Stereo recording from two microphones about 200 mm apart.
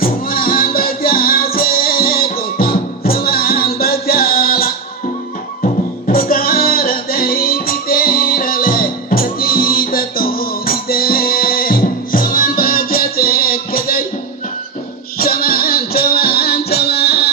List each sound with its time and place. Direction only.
0.0 s music: 45° left (ahead or behind)
15.2 s music: 45° left (ahead or behind)